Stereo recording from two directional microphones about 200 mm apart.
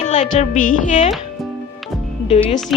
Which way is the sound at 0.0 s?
35° left (ahead or behind).